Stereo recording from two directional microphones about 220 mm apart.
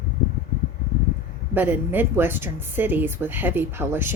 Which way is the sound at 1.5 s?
10° right (ahead or behind).